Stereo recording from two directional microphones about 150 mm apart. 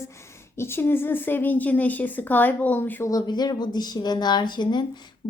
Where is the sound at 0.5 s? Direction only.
15° left (ahead or behind).